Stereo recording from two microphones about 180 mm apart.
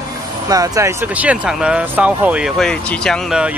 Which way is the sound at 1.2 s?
5° right (ahead or behind).